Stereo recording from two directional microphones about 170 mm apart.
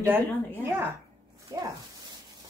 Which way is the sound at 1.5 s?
20° right (ahead or behind).